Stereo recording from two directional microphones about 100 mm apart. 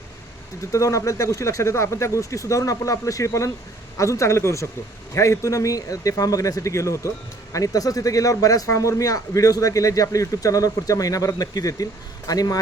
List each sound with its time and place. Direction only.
0.6 s a man's voice: 30° left (ahead or behind)